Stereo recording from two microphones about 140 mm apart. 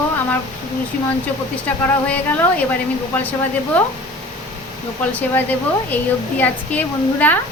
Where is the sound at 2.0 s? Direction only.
15° left (ahead or behind).